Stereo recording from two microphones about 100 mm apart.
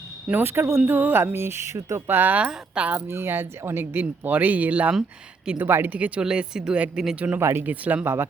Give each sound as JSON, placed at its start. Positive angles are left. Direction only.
{"t": 0.3, "sound": "speech", "side_deg": -20}
{"t": 7.3, "sound": "speech", "side_deg": -25}